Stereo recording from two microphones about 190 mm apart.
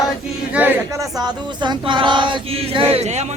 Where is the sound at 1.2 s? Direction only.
25° right (ahead or behind).